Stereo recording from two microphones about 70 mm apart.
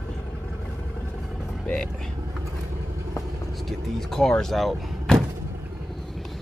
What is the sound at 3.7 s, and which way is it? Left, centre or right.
Vehicle, centre.